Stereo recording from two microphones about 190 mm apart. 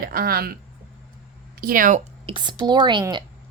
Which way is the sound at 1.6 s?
45° right (ahead or behind).